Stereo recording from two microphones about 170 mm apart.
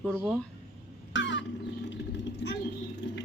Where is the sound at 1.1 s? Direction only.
90° left.